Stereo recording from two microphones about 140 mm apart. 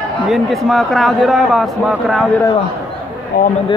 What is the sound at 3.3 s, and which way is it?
Speech, 90° left.